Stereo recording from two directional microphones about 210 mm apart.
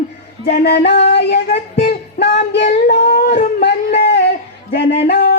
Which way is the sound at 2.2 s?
55° left (ahead or behind).